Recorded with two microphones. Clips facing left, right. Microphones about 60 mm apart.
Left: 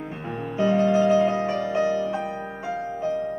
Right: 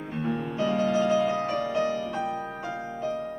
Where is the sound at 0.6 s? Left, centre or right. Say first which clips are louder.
Left 6 dB; centre.